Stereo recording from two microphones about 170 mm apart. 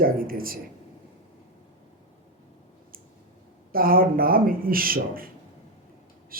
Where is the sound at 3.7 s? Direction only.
60° right (ahead or behind).